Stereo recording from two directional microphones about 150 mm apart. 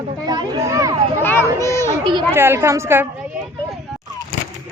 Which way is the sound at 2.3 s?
15° right (ahead or behind).